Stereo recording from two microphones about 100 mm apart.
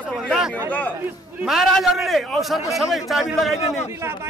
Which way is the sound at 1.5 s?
Centre (ahead or behind).